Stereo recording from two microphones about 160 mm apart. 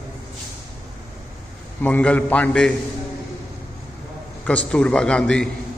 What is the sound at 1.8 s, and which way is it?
Speech, 10° left (ahead or behind).